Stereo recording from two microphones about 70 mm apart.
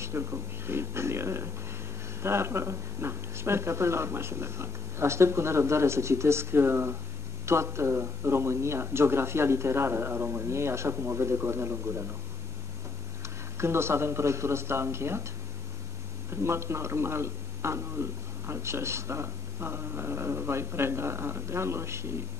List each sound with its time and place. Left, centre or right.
0.0 s speech: right
13.6 s speech: right
16.3 s a man's voice: right